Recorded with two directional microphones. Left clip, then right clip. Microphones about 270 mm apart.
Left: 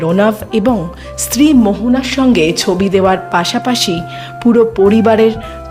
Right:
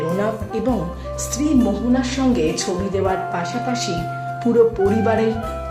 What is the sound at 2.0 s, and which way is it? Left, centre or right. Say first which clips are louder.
Speech: left 8 dB; left.